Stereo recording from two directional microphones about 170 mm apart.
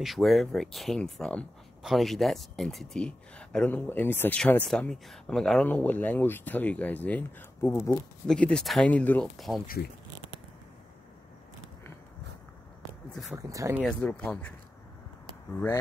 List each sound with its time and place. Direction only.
0.0 s speech: centre (ahead or behind); by 8.0 s 15° left (ahead or behind)
8.3 s speech: 5° left (ahead or behind)
13.4 s speech: 20° right (ahead or behind)
13.8 s speech: 5° left (ahead or behind)